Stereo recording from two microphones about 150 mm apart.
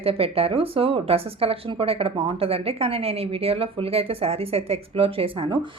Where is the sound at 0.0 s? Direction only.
40° right (ahead or behind).